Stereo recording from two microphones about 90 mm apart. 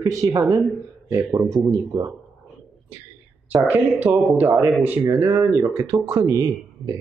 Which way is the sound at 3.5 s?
20° right (ahead or behind).